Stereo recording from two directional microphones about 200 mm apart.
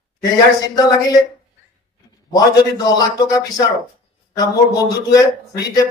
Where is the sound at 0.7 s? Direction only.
20° left (ahead or behind).